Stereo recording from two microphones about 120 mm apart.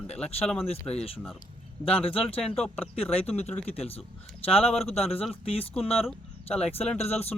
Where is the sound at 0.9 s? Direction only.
55° left (ahead or behind).